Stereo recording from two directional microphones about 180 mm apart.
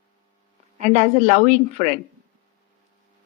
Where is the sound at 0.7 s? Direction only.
40° right (ahead or behind).